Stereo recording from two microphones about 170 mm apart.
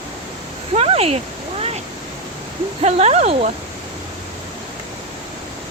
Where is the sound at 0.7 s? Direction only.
35° right (ahead or behind).